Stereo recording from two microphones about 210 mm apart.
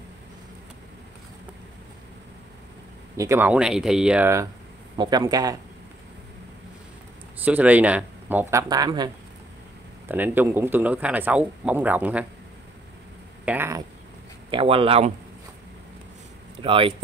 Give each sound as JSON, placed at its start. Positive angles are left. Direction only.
{"t": 3.2, "sound": "a man's voice", "side_deg": -10}
{"t": 7.4, "sound": "a man's voice", "side_deg": -5}
{"t": 13.5, "sound": "a man's voice", "side_deg": -10}
{"t": 14.5, "sound": "speech", "side_deg": -25}
{"t": 16.6, "sound": "speech", "side_deg": -25}